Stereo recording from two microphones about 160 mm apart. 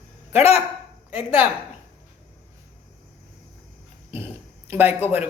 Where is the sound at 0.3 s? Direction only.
40° left (ahead or behind).